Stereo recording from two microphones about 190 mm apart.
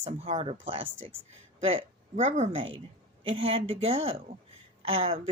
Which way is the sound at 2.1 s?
35° right (ahead or behind).